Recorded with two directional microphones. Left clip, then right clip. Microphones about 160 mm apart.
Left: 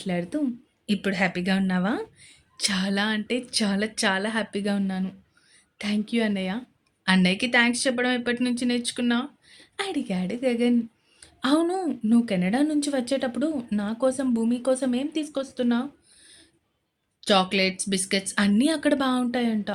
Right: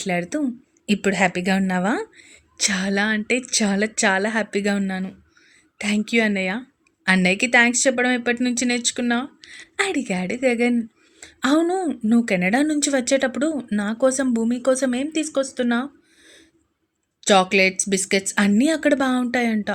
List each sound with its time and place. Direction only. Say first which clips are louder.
0.0 s a woman's voice: right 5 dB; 30° right (ahead or behind)